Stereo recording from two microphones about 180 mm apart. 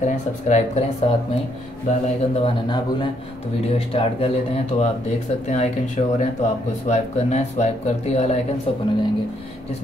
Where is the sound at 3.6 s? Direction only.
30° left (ahead or behind).